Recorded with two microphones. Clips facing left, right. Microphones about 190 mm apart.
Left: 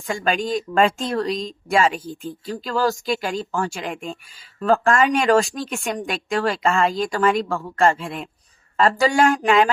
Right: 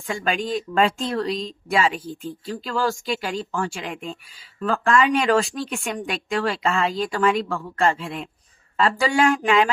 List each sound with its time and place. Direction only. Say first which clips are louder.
0.1 s speech: left 2 dB; 45° left (ahead or behind)